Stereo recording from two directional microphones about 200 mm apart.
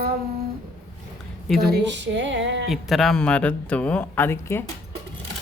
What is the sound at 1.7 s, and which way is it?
Speech, 60° right (ahead or behind).